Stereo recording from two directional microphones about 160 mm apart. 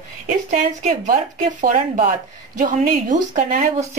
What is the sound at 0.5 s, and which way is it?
Speech, 50° right (ahead or behind).